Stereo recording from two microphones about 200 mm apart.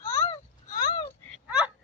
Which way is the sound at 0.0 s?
15° left (ahead or behind).